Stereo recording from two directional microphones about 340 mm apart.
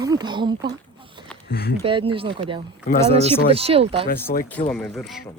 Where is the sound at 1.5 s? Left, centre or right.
Left.